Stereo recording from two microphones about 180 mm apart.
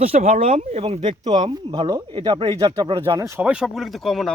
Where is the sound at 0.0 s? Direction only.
35° right (ahead or behind).